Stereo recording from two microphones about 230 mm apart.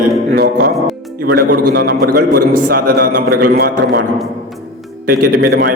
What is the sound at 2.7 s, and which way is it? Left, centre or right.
A man's voice, right.